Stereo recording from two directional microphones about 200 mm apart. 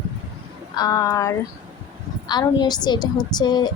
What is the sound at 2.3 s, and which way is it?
A woman's voice, 20° left (ahead or behind).